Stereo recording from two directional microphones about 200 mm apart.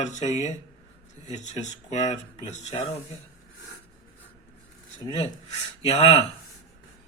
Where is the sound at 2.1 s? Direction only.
35° left (ahead or behind).